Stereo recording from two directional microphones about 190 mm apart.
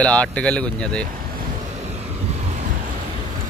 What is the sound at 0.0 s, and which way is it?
Speech, 5° left (ahead or behind).